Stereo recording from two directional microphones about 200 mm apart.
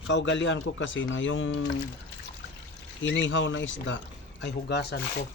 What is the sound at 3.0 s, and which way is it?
Speech, 65° left (ahead or behind).